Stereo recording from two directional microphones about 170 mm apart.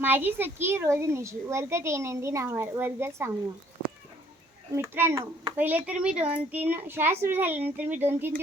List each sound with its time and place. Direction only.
0.0 s speech: 10° right (ahead or behind)
4.7 s speech: 15° right (ahead or behind)